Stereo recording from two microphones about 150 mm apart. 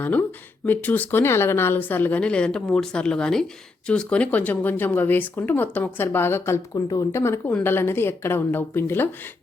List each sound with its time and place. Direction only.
0.0 s speech: 10° left (ahead or behind)